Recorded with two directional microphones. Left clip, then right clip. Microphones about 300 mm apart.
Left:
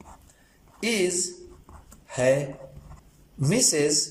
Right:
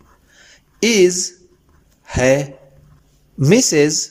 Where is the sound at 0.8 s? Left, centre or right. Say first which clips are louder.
Right 12 dB; right.